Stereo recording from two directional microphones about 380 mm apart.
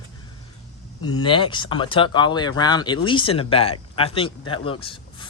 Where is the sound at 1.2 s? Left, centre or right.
Centre.